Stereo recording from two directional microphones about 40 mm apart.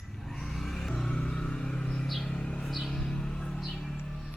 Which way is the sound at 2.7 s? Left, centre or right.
Centre.